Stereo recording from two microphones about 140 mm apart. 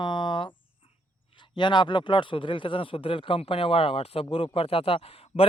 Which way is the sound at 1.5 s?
35° left (ahead or behind).